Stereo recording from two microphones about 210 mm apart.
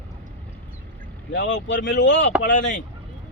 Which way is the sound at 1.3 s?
60° left (ahead or behind).